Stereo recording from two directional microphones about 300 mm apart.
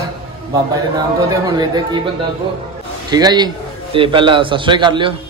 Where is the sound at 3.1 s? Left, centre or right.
Centre.